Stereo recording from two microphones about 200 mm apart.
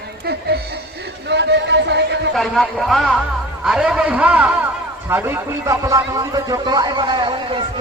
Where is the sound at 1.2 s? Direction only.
60° right (ahead or behind).